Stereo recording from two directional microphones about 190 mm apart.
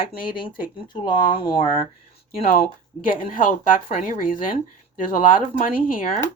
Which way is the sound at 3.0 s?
45° left (ahead or behind).